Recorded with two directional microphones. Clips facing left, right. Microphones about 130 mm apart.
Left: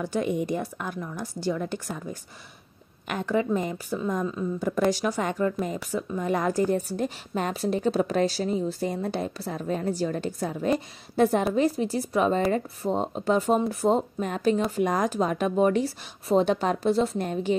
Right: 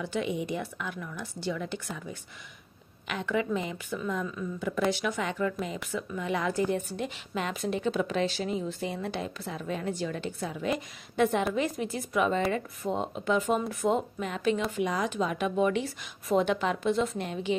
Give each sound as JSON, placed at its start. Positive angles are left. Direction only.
{"t": 0.0, "sound": "speech", "side_deg": 40}